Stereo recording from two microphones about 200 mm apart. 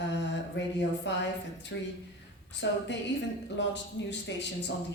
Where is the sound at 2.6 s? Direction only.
60° left (ahead or behind).